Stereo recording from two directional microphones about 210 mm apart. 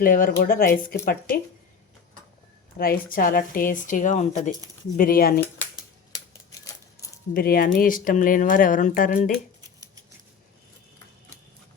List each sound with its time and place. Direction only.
0.0 s speech: 40° left (ahead or behind)
2.7 s speech: 45° left (ahead or behind)
7.0 s keys jangling: 15° left (ahead or behind)
7.3 s speech: 45° left (ahead or behind)